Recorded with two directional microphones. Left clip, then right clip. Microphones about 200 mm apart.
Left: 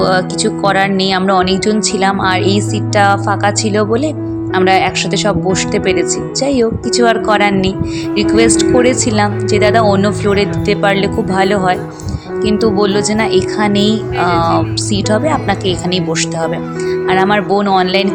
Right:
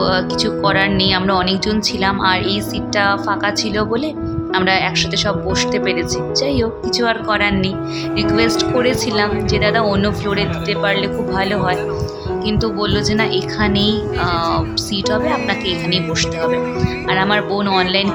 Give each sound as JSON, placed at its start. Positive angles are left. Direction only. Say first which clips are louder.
{"t": 0.0, "sound": "speech", "louder": "left 4 dB", "side_deg": 20}
{"t": 17.1, "sound": "speech", "louder": "left 4 dB", "side_deg": 20}